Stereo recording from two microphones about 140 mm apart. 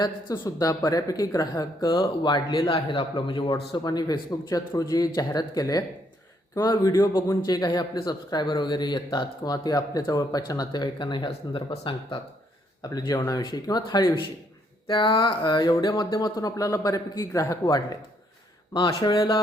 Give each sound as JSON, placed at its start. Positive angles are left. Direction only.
{"t": 0.0, "sound": "a man's voice", "side_deg": 25}